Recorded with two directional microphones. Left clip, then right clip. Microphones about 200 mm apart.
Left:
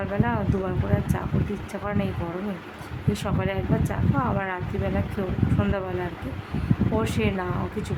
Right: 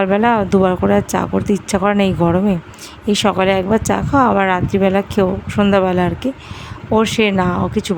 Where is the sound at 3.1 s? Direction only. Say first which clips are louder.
Right 14 dB; 45° right (ahead or behind).